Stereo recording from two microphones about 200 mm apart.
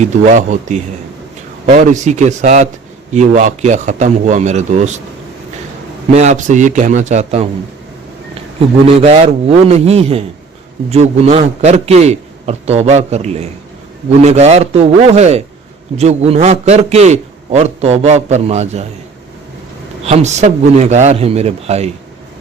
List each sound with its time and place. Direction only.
0.0 s a man's voice: 40° right (ahead or behind)
6.1 s a man's voice: 35° right (ahead or behind)
9.0 s a man's voice: 30° right (ahead or behind)
20.1 s a man's voice: 35° right (ahead or behind)